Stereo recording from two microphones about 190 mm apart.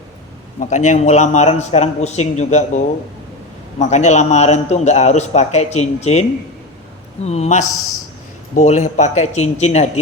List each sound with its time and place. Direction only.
0.6 s a man's voice: 40° left (ahead or behind)
7.3 s a man's voice: 35° left (ahead or behind)